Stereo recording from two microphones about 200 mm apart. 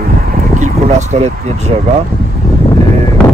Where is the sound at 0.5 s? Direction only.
35° right (ahead or behind).